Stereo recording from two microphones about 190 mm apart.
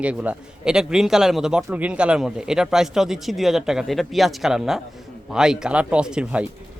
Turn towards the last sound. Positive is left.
turn(degrees=-5)  # may be behind; listen again after turning